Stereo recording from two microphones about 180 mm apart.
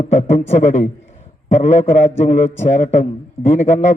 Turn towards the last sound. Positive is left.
turn(degrees=40)  # may be behind; listen again after turning